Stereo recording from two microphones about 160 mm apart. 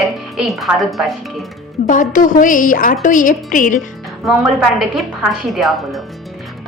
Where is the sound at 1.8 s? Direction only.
55° left (ahead or behind).